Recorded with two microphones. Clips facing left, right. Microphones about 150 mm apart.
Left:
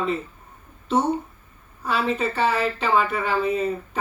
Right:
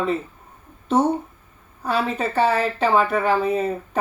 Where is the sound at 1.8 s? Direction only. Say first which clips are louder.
Right 1 dB; 45° right (ahead or behind).